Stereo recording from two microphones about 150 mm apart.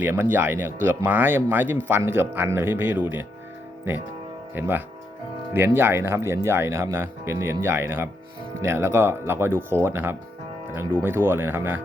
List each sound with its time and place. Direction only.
0.0 s speech: 15° right (ahead or behind)